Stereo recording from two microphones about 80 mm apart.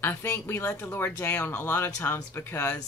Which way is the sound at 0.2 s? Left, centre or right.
Left.